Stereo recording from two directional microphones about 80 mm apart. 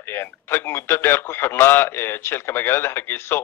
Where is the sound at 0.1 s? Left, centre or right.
Left.